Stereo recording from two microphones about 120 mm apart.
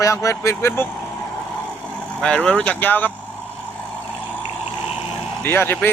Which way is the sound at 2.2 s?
10° left (ahead or behind).